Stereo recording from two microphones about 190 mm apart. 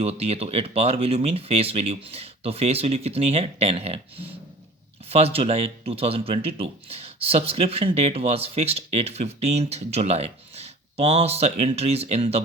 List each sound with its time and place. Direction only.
0.0 s speech: 30° right (ahead or behind)